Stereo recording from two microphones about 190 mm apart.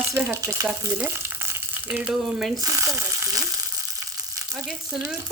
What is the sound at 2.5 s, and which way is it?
Frying, 15° right (ahead or behind).